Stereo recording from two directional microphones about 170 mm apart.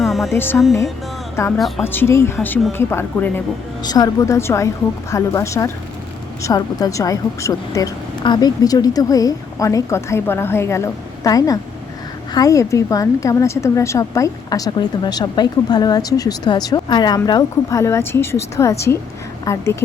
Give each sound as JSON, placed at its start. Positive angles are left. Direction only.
{"t": 0.0, "sound": "music", "side_deg": 0}
{"t": 0.3, "sound": "speech", "side_deg": 10}
{"t": 1.5, "sound": "a woman's voice", "side_deg": 0}
{"t": 1.8, "sound": "a woman's voice", "side_deg": 15}